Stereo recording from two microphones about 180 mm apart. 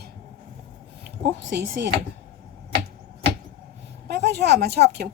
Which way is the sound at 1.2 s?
70° right (ahead or behind).